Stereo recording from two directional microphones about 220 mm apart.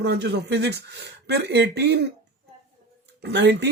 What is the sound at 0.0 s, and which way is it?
Speech, 50° right (ahead or behind).